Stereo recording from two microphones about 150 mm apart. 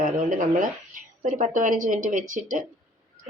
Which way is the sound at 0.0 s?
60° right (ahead or behind).